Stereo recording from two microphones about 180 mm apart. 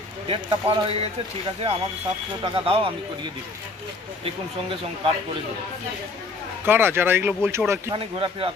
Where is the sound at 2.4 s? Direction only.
30° right (ahead or behind).